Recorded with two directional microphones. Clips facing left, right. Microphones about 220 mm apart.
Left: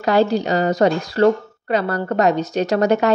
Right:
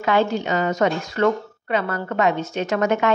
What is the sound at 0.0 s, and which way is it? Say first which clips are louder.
A woman's voice: left 4 dB; 35° left (ahead or behind).